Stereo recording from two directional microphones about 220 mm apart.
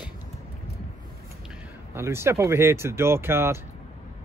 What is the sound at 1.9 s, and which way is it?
Speech, 10° right (ahead or behind).